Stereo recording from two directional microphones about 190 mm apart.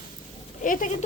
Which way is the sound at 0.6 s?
45° left (ahead or behind).